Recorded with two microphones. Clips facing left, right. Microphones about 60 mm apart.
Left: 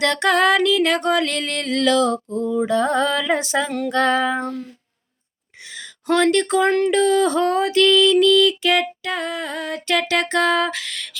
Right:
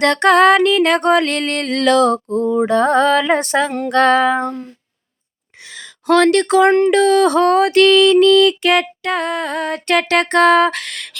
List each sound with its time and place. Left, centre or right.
0.0 s music: right
5.6 s a sound: right
6.2 s music: right
6.7 s speech: right
6.9 s music: right